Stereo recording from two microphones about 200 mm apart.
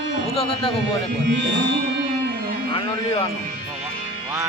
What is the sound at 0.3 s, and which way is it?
Speech, 30° left (ahead or behind).